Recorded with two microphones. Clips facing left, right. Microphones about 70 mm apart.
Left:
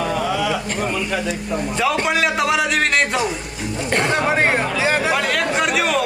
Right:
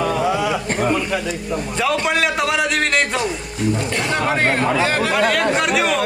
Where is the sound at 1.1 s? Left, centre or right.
Centre.